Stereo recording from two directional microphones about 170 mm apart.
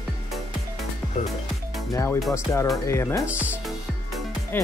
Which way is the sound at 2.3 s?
15° left (ahead or behind).